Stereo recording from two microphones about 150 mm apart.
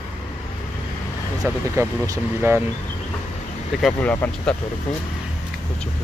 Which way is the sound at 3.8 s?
10° left (ahead or behind).